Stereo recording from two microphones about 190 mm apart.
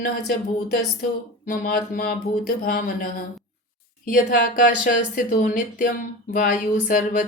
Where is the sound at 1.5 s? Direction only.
50° left (ahead or behind).